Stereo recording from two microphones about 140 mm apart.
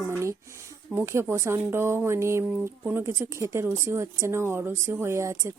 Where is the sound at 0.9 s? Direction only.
20° right (ahead or behind).